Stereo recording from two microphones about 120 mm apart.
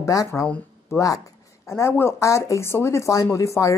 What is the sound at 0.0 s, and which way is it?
Speech, 25° left (ahead or behind).